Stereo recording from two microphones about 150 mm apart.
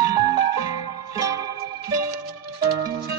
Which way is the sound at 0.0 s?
25° right (ahead or behind).